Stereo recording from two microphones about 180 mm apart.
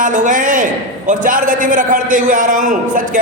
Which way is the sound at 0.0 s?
45° right (ahead or behind).